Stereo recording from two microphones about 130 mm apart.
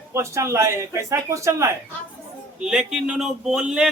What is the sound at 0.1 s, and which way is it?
Speech, 20° right (ahead or behind).